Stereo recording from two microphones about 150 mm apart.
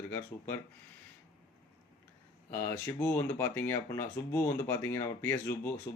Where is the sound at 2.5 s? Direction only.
15° left (ahead or behind).